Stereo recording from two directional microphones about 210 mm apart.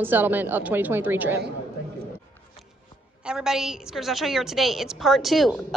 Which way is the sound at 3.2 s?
Centre (ahead or behind).